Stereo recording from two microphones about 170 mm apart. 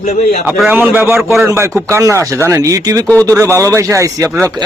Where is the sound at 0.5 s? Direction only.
10° right (ahead or behind).